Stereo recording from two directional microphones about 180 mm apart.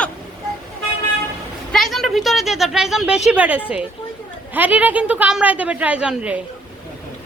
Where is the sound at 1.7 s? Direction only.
Centre (ahead or behind).